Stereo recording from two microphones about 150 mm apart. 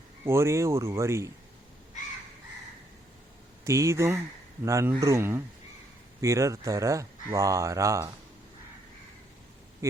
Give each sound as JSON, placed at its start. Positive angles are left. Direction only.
{"t": 0.3, "sound": "speech", "side_deg": -20}
{"t": 3.6, "sound": "speech", "side_deg": -20}